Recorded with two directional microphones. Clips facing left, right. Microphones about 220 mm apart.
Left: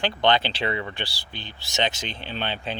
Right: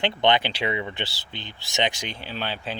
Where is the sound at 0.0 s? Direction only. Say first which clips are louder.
Even; 20° right (ahead or behind).